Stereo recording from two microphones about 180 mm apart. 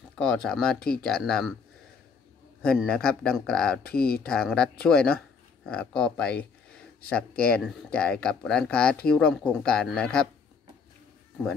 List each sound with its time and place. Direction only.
0.2 s speech: 5° left (ahead or behind)
2.6 s speech: 5° left (ahead or behind)
3.9 s speech: 55° left (ahead or behind)
4.3 s speech: 5° left (ahead or behind)